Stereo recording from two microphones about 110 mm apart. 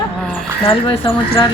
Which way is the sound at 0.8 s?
50° left (ahead or behind).